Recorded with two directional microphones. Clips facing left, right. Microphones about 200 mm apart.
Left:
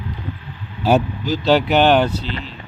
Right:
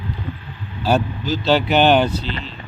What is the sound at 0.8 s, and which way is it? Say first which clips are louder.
Speech: left 2 dB; 15° left (ahead or behind).